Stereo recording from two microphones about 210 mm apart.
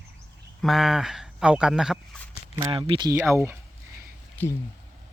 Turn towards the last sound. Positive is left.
turn(degrees=10)  # may be behind; listen again after turning